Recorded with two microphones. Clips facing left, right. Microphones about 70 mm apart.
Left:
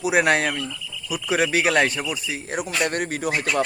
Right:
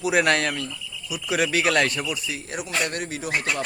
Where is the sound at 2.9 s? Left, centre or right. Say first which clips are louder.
Left 5 dB; left.